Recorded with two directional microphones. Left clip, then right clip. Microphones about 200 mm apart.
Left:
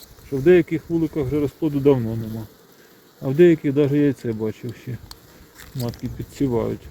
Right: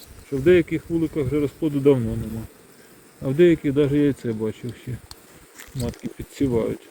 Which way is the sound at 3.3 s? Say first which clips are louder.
Left 2 dB; 30° left (ahead or behind).